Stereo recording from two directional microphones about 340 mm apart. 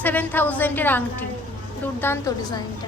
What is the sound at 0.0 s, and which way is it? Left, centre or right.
A woman's voice, centre.